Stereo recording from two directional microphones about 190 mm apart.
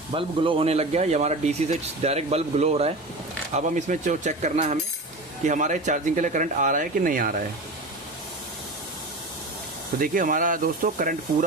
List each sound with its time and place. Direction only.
0.1 s speech: 30° right (ahead or behind); by 7.4 s 50° right (ahead or behind)
10.0 s speech: 45° right (ahead or behind)